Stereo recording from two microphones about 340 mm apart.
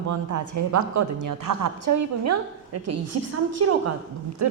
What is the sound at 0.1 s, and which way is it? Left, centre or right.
A woman's voice, right.